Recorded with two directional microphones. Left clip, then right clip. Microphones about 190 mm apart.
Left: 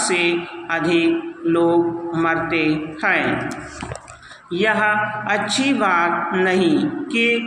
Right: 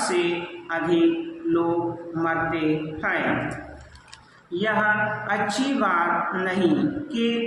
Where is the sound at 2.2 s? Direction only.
25° left (ahead or behind).